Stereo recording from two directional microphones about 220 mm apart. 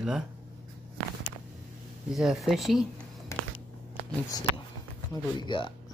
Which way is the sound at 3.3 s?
10° left (ahead or behind).